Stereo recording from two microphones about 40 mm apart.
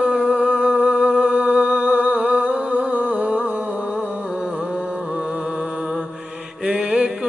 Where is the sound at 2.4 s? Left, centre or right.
Right.